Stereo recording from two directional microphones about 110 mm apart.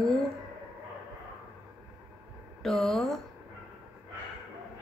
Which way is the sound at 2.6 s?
5° left (ahead or behind).